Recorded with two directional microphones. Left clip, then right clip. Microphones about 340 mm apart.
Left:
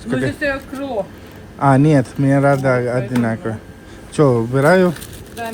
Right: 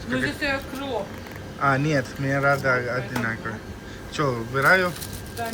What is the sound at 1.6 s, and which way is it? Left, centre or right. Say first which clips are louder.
Speech: left 8 dB; centre.